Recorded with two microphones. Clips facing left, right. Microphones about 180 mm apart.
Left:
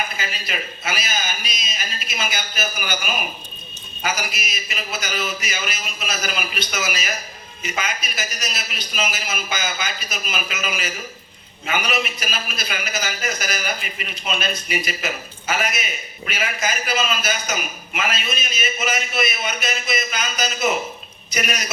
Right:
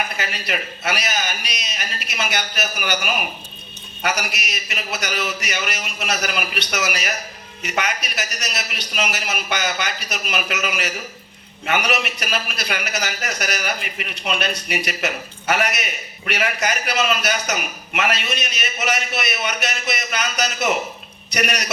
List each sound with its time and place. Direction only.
0.2 s a man's voice: 70° right (ahead or behind)